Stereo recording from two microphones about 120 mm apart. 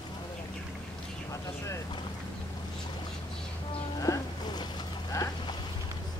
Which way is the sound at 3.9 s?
30° left (ahead or behind).